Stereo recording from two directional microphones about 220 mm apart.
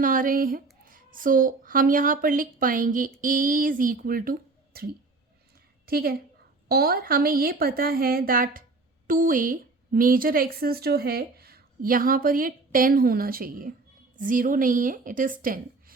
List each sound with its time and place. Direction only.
0.0 s a woman's voice: 40° right (ahead or behind)